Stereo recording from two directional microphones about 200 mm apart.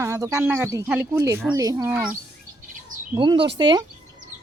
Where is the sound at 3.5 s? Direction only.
20° right (ahead or behind).